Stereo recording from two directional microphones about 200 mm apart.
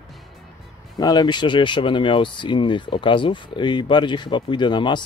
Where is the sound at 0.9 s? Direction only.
20° left (ahead or behind).